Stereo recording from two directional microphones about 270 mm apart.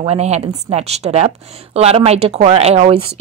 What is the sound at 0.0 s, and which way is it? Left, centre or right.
A woman's voice, right.